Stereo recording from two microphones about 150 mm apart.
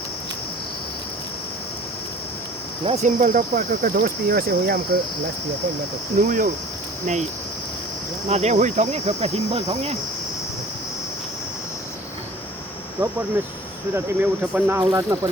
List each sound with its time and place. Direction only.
2.8 s speech: 50° right (ahead or behind); by 4.9 s 85° right
6.2 s speech: 65° right (ahead or behind)
7.0 s speech: 50° right (ahead or behind)
8.3 s speech: 50° right (ahead or behind)
13.0 s speech: 25° right (ahead or behind)
13.9 s speech: 15° right (ahead or behind)